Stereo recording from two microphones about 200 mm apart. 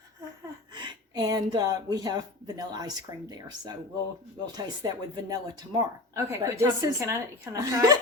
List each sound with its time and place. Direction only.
0.7 s speech: 20° right (ahead or behind)